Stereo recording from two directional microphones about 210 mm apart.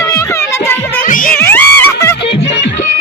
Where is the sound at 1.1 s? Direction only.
40° left (ahead or behind).